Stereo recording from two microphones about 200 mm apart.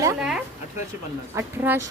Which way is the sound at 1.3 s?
10° right (ahead or behind).